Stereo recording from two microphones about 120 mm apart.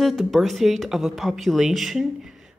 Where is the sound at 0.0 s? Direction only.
Centre (ahead or behind).